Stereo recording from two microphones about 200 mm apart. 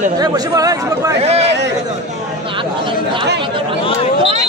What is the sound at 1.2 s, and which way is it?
Speech, 30° right (ahead or behind).